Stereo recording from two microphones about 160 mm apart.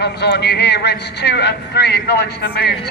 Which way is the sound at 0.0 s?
90° left.